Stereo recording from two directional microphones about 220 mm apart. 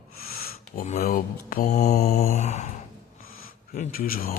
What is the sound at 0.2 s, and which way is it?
Speech, 40° left (ahead or behind).